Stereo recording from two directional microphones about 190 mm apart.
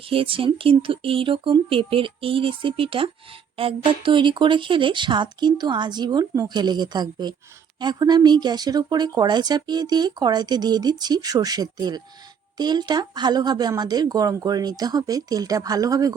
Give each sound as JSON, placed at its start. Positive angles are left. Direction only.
{"t": 0.0, "sound": "speech", "side_deg": -30}